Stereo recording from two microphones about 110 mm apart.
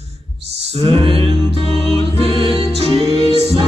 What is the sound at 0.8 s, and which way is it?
Music, 55° right (ahead or behind).